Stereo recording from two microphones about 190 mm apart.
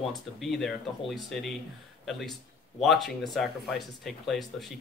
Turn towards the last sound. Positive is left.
turn(degrees=0)  # may be behind; listen again after turning